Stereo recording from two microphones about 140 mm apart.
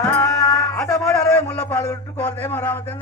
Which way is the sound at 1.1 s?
10° left (ahead or behind).